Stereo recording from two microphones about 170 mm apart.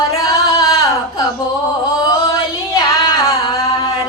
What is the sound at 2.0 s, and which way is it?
Singing, 20° left (ahead or behind).